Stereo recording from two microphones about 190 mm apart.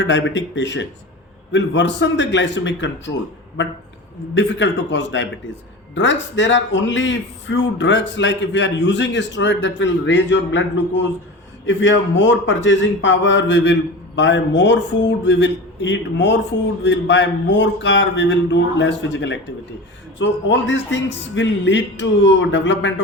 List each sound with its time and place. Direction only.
0.0 s a man's voice: 70° left (ahead or behind)
4.4 s a man's voice: 70° left (ahead or behind)